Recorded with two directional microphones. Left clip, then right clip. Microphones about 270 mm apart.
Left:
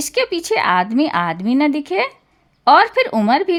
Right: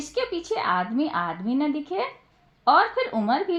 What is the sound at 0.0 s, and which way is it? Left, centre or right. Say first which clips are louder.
A woman's voice: left 9 dB; left.